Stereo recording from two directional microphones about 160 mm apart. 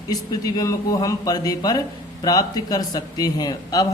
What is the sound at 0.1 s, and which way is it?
Mantra, 25° left (ahead or behind).